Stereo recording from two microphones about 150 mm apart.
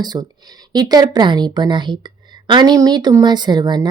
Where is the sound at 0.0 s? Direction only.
25° right (ahead or behind).